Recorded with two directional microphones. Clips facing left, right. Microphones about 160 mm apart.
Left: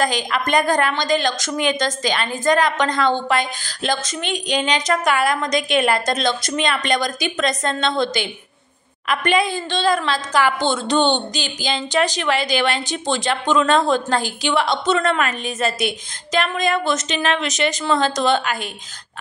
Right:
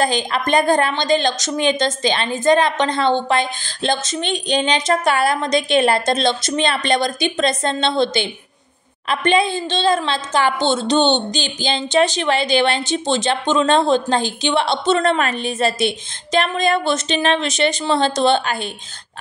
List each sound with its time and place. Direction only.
0.0 s a woman's voice: 30° right (ahead or behind)